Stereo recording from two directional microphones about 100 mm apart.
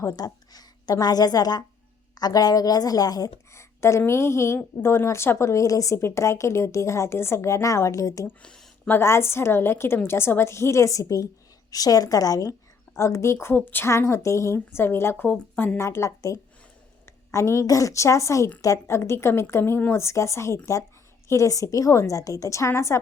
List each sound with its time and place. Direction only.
0.0 s a woman's voice: 30° left (ahead or behind)
8.3 s a sound: 10° left (ahead or behind)
8.9 s a woman's voice: 25° left (ahead or behind)